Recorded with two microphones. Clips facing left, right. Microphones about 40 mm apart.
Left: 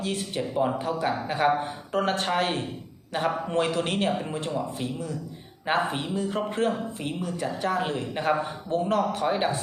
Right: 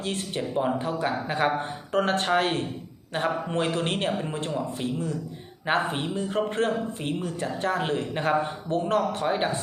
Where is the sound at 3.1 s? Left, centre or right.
Right.